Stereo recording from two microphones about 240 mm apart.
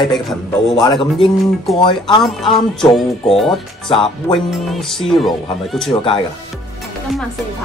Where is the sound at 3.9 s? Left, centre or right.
Left.